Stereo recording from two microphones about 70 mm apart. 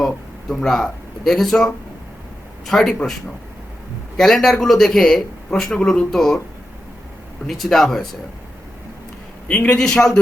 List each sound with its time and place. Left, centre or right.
0.0 s a man's voice: centre
4.2 s a man's voice: centre
7.4 s a man's voice: centre
9.5 s a man's voice: centre
9.8 s speech: centre